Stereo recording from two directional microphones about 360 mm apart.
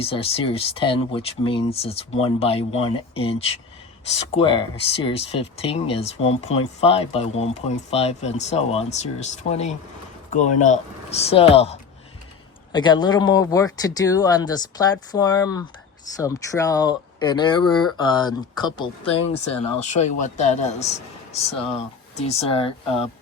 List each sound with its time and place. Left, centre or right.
0.0 s speech: centre